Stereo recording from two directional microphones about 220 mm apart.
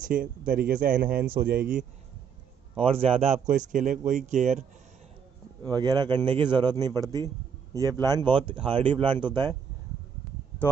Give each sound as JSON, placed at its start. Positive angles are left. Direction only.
{"t": 0.0, "sound": "speech", "side_deg": -40}
{"t": 2.8, "sound": "speech", "side_deg": -25}
{"t": 5.7, "sound": "speech", "side_deg": -20}